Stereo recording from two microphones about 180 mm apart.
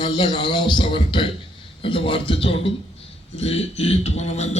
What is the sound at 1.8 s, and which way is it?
Mantra, 30° left (ahead or behind).